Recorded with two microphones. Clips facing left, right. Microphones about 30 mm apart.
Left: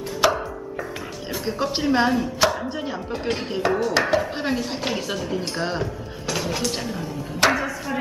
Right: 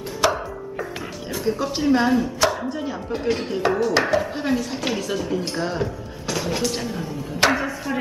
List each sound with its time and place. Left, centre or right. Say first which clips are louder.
0.2 s music: left 1 dB; centre
1.4 s speech: right 2 dB; left
1.9 s chopping: right 2 dB; centre
2.7 s speech: right 1 dB; left
3.1 s chopping: right 5 dB; centre
3.6 s a sound: right 1 dB; centre
4.4 s speech: right 1 dB; left
5.1 s chopping: right 2 dB; centre
5.8 s speech: right 1 dB; centre